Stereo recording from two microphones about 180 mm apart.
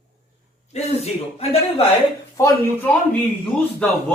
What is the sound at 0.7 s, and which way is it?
Speech, 40° left (ahead or behind).